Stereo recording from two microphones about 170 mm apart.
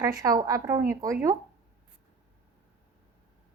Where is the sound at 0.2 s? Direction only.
20° right (ahead or behind).